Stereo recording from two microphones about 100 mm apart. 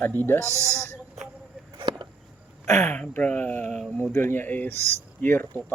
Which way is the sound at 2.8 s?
10° left (ahead or behind).